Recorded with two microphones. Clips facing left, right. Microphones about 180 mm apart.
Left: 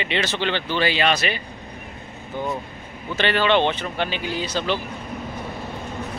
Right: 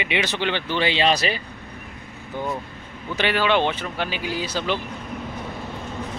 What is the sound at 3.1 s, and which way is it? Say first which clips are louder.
Speech: left 1 dB; 10° right (ahead or behind).